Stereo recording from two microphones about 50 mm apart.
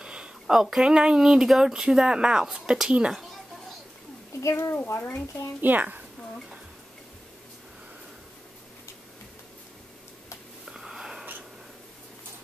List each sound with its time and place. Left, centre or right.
0.0 s speech: centre
2.9 s speech: centre
4.4 s speech: left
5.6 s a woman's voice: right
10.7 s wheeze: centre